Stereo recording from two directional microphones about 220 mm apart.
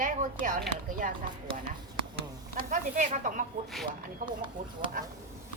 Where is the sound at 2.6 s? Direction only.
35° right (ahead or behind).